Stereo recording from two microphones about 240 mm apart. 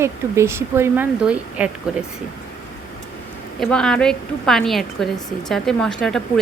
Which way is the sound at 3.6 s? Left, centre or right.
Centre.